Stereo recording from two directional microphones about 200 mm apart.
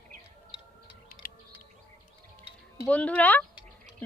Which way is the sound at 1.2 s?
45° left (ahead or behind).